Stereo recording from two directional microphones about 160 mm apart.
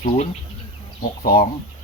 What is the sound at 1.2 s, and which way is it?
Speech, 70° left (ahead or behind).